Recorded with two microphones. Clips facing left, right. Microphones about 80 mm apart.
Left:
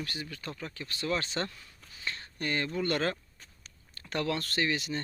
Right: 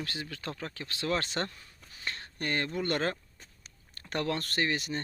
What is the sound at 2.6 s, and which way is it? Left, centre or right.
Speech, right.